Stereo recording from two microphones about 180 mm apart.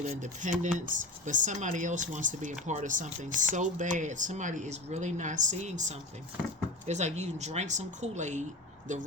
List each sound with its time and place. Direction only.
0.0 s speech: 40° right (ahead or behind)